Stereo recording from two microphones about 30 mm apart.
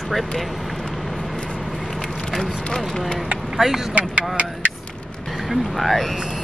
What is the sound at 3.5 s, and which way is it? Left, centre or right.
Speech, centre.